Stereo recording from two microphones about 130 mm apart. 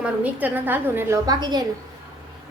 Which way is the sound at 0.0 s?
10° right (ahead or behind).